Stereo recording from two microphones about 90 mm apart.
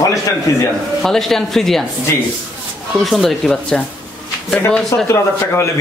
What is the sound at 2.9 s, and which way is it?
Speech, centre (ahead or behind).